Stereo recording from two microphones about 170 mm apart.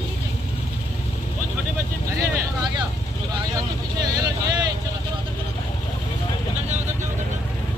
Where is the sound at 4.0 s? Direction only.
25° right (ahead or behind).